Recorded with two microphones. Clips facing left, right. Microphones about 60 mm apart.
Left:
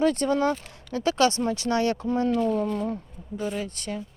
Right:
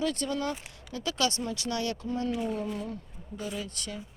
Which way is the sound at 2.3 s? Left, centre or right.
Centre.